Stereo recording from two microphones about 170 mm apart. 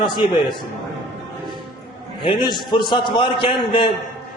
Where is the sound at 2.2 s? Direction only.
30° left (ahead or behind).